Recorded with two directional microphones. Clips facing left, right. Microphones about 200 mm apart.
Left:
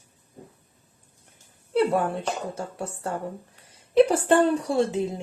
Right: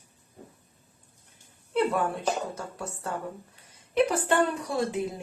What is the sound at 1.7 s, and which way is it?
Speech, 30° left (ahead or behind).